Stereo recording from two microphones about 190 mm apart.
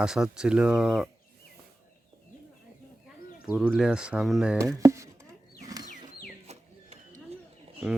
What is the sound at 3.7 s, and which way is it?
Speech, 5° right (ahead or behind).